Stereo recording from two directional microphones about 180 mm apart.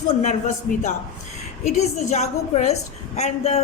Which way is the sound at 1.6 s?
40° left (ahead or behind).